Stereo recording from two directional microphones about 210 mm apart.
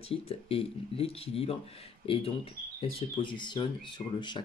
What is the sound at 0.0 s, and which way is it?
Speech, 30° left (ahead or behind).